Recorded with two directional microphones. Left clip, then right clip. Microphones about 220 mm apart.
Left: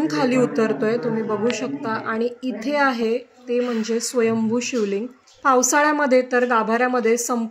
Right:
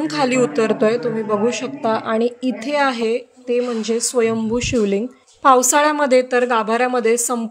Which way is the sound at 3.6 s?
15° right (ahead or behind).